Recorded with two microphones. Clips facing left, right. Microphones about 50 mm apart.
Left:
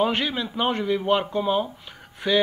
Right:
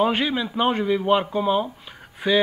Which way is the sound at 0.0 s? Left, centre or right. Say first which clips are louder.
Right 2 dB; centre.